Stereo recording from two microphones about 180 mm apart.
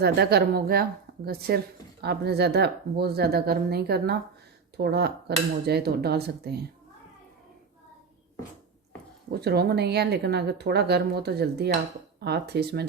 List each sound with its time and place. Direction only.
0.0 s a woman's voice: 65° right (ahead or behind)
9.3 s a woman's voice: 65° right (ahead or behind)